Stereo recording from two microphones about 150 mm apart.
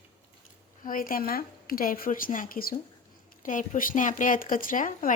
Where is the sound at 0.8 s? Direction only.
70° left (ahead or behind).